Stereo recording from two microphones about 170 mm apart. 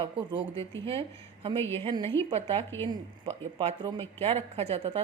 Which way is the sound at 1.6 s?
15° left (ahead or behind).